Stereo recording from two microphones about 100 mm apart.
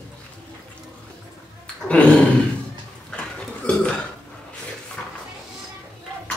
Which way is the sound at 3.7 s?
10° left (ahead or behind).